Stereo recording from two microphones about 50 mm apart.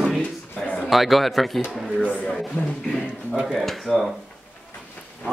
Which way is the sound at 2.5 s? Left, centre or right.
Left.